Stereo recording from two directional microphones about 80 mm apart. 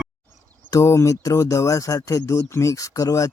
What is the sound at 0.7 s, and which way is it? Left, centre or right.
Speech, left.